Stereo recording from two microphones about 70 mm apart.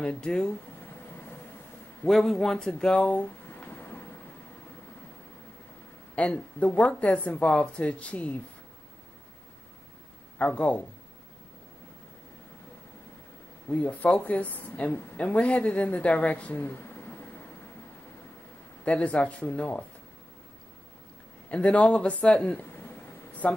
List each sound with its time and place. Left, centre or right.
0.0 s speech: centre
2.0 s speech: centre
3.4 s a sound: left
6.1 s speech: centre
10.4 s a woman's voice: left
13.7 s a woman's voice: left
18.9 s a woman's voice: centre
21.5 s speech: centre